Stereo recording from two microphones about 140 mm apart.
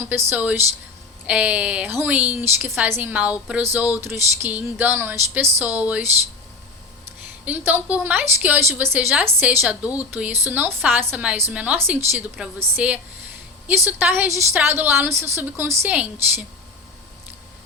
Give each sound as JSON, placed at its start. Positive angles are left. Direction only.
{"t": 0.3, "sound": "a woman's voice", "side_deg": -15}
{"t": 7.4, "sound": "a woman's voice", "side_deg": -15}